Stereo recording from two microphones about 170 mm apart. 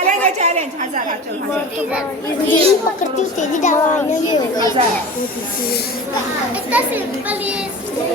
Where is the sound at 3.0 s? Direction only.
45° left (ahead or behind).